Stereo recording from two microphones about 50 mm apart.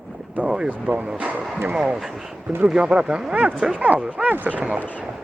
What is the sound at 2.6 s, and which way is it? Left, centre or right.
Speech, centre.